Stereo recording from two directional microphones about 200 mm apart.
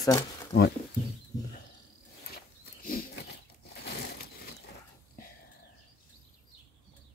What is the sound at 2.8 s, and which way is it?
Wild animals, 45° left (ahead or behind).